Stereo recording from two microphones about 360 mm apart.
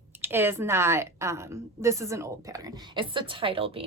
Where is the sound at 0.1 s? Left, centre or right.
Centre.